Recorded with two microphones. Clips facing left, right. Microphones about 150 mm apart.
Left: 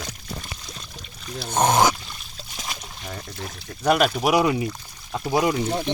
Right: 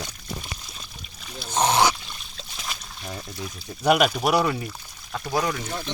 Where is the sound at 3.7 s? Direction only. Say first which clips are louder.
Even; 5° right (ahead or behind).